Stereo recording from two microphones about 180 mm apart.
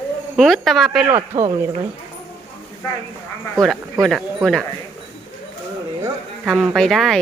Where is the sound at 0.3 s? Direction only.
Centre (ahead or behind).